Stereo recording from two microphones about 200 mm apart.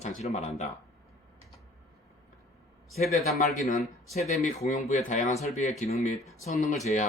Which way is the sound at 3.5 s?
35° left (ahead or behind).